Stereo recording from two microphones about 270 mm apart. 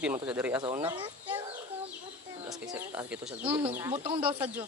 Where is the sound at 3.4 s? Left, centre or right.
Centre.